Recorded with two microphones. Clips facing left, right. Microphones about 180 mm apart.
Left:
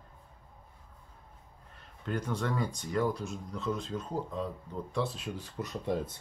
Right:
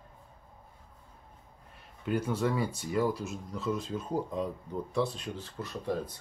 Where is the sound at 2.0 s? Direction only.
10° right (ahead or behind).